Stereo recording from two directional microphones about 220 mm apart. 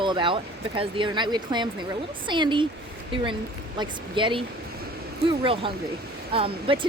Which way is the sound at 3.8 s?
20° right (ahead or behind).